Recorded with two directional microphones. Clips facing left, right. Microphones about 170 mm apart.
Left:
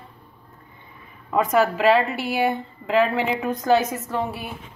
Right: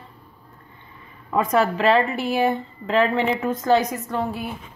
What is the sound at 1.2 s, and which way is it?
A woman's voice, 5° left (ahead or behind).